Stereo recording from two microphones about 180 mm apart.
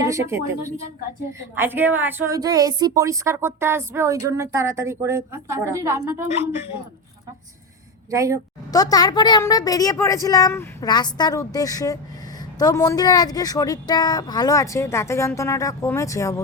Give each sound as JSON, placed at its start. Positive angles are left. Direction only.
{"t": 0.0, "sound": "a woman's voice", "side_deg": -15}
{"t": 8.1, "sound": "a woman's voice", "side_deg": -15}
{"t": 8.7, "sound": "speech", "side_deg": 20}